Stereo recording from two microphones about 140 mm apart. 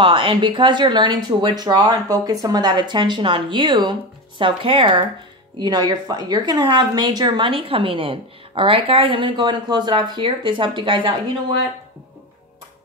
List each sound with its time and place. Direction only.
0.0 s a woman's voice: 35° right (ahead or behind)